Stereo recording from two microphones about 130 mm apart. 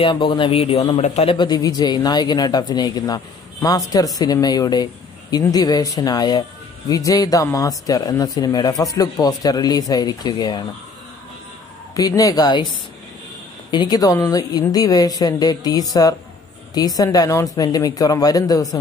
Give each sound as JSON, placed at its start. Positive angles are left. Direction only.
{"t": 0.0, "sound": "speech", "side_deg": 40}
{"t": 1.3, "sound": "speech", "side_deg": 35}
{"t": 11.9, "sound": "speech", "side_deg": 25}
{"t": 13.7, "sound": "speech", "side_deg": 30}